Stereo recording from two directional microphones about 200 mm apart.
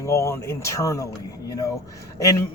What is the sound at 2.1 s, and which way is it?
Speech, 15° left (ahead or behind).